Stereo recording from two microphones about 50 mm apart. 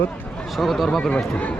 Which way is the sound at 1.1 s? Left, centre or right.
Left.